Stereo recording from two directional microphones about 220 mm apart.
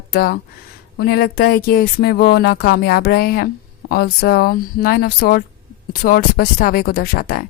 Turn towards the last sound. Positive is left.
turn(degrees=40)  # may be behind; listen again after turning